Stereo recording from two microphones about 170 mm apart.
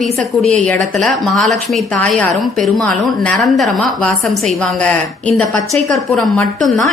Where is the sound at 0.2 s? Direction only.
5° left (ahead or behind).